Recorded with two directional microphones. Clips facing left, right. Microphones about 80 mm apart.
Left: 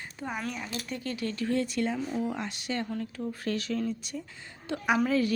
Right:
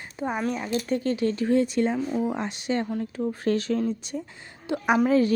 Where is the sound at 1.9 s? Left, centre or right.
Centre.